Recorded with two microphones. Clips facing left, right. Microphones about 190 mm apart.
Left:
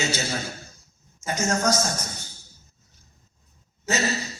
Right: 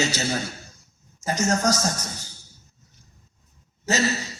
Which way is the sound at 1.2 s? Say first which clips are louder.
Right 2 dB; 35° right (ahead or behind).